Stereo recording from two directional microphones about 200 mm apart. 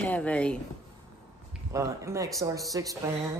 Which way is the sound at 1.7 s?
15° right (ahead or behind).